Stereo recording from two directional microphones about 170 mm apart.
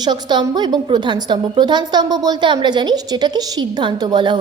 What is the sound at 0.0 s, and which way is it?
A woman's voice, 25° right (ahead or behind).